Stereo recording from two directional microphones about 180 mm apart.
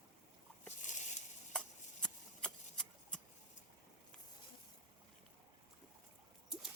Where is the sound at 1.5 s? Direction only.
5° left (ahead or behind).